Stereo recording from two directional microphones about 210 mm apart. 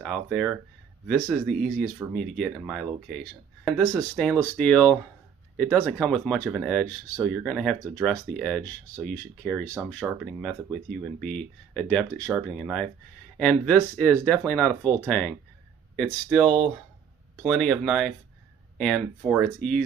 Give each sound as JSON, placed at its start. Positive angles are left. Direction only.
{"t": 0.0, "sound": "speech", "side_deg": 0}